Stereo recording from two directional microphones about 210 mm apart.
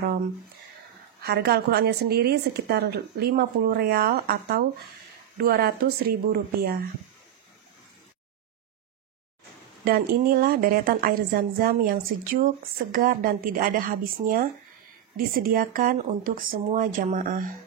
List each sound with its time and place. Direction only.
1.2 s a woman's voice: 50° right (ahead or behind)
9.8 s a woman's voice: 45° right (ahead or behind)